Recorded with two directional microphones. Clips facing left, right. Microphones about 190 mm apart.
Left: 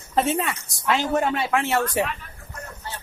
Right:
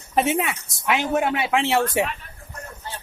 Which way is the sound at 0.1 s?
15° right (ahead or behind).